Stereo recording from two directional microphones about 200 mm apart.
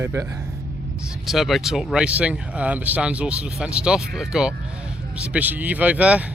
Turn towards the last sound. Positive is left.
turn(degrees=-5)  # may be behind; listen again after turning